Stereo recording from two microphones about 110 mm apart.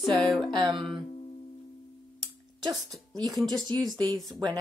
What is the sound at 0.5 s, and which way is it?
Music, 45° right (ahead or behind).